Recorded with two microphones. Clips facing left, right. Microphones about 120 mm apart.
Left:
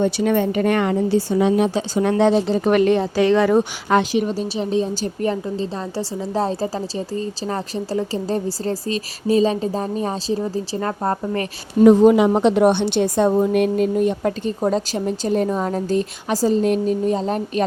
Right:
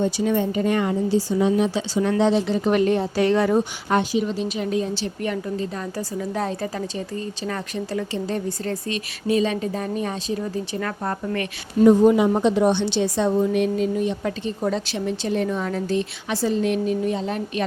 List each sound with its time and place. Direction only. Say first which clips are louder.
0.0 s a woman's voice: left 3 dB; 65° left (ahead or behind)
1.7 s a woman's voice: left 3 dB; 55° left (ahead or behind)
2.6 s speech: left 4 dB; 70° left (ahead or behind); by 4.2 s 90° left
4.2 s a woman's voice: left 2 dB; 45° left (ahead or behind)
4.4 s a woman's voice: left 3 dB; 30° left (ahead or behind)
11.9 s a woman's voice: left 3 dB; 90° left; by 17.6 s 40° left (ahead or behind)